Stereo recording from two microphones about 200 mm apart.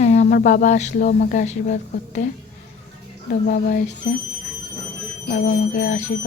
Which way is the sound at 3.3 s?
50° left (ahead or behind).